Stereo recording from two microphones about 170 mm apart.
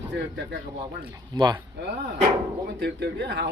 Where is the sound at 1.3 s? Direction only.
25° right (ahead or behind).